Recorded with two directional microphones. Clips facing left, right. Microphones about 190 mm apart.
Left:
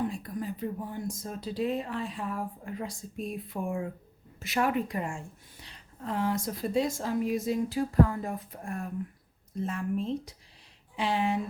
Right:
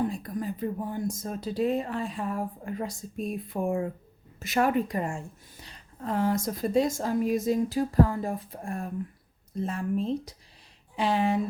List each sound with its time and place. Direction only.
0.1 s speech: 40° right (ahead or behind)